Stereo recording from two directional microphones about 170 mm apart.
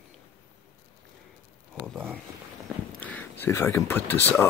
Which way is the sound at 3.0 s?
10° left (ahead or behind).